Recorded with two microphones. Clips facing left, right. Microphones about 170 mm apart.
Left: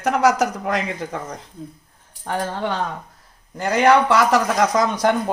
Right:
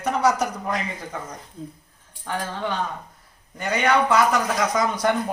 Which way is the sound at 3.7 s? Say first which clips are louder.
Left 4 dB; 85° left.